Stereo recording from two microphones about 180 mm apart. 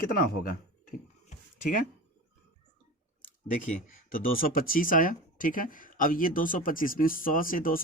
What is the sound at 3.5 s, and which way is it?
Speech, 45° left (ahead or behind).